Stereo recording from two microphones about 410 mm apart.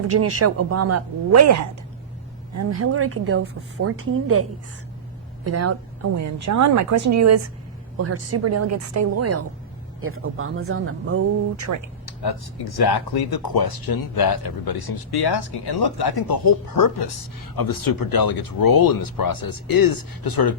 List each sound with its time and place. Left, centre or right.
0.1 s a woman's voice: right
5.5 s a woman's voice: right
11.6 s speech: right
12.0 s speech: left